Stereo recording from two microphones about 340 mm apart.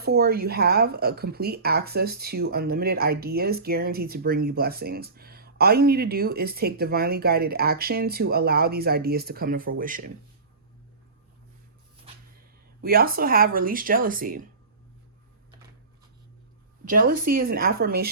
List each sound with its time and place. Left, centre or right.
0.0 s speech: right
12.8 s speech: right
16.9 s speech: right